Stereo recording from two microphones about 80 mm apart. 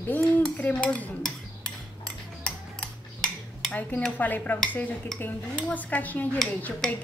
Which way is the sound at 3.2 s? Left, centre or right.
Centre.